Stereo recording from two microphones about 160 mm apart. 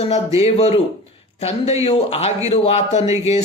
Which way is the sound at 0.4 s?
40° left (ahead or behind).